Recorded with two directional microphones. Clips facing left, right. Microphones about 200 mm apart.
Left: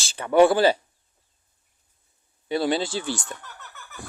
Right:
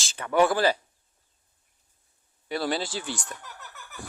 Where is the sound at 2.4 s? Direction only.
25° left (ahead or behind).